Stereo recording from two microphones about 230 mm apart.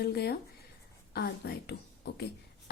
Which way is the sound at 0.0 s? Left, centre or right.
Left.